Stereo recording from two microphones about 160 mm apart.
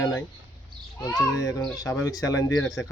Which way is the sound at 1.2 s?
20° left (ahead or behind).